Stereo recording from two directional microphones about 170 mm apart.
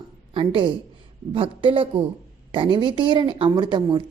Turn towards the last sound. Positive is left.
turn(degrees=-25)  # may be behind; listen again after turning